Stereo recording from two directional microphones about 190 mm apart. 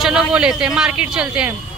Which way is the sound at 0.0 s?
5° right (ahead or behind).